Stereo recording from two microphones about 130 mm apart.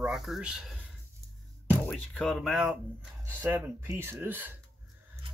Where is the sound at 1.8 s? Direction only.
5° left (ahead or behind).